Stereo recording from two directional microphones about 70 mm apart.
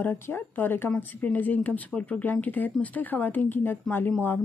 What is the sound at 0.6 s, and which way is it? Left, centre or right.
A woman's voice, left.